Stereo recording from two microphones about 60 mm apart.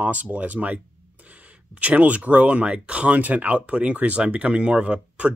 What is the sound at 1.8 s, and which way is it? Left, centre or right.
Speech, right.